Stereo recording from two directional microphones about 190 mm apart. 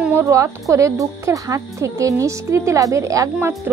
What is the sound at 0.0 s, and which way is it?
Speech, 10° right (ahead or behind).